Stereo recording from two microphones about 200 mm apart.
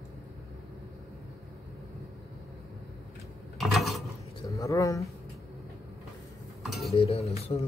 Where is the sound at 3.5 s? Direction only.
Centre (ahead or behind).